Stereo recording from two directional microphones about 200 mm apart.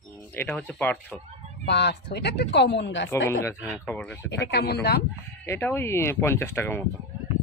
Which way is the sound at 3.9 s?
10° left (ahead or behind).